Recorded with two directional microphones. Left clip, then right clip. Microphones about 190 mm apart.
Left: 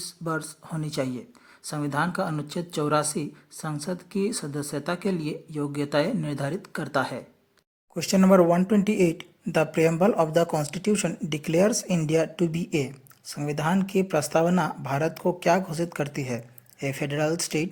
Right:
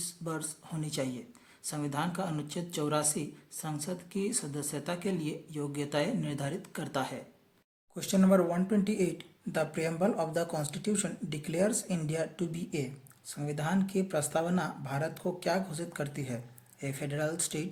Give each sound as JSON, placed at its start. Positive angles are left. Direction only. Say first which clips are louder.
{"t": 0.0, "sound": "speech", "louder": "left 8 dB", "side_deg": 30}